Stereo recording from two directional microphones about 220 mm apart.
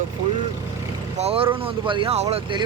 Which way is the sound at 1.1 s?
25° right (ahead or behind).